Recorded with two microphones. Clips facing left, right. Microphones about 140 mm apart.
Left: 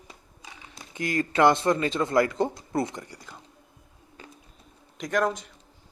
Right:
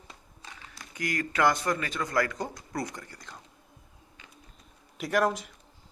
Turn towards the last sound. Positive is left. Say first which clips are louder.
# even
turn(degrees=-5)  # may be behind; listen again after turning